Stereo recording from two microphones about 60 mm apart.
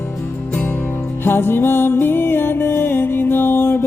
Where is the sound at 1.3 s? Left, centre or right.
Left.